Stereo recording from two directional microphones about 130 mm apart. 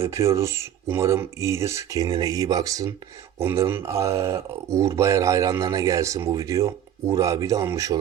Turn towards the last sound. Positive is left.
turn(degrees=-25)  # may be behind; listen again after turning